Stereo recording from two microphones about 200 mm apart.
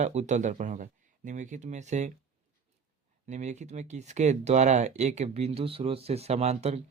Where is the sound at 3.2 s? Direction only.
35° right (ahead or behind).